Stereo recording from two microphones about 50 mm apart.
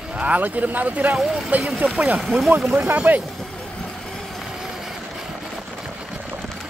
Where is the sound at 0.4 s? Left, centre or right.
Right.